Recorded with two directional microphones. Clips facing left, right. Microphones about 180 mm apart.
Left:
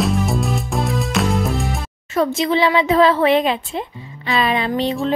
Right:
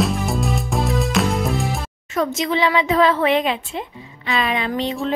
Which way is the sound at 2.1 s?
30° left (ahead or behind).